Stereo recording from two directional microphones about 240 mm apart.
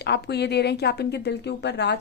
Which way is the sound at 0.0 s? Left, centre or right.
Left.